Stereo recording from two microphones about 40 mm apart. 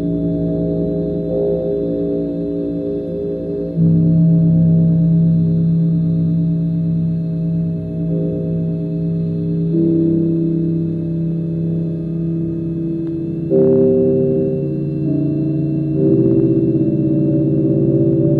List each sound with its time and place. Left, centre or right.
4.0 s gong: centre
13.5 s music: centre
14.1 s music: right
16.0 s music: centre
16.5 s a sound: right
17.1 s gong: centre